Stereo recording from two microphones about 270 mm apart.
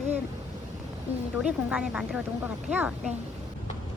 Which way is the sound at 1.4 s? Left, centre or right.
Centre.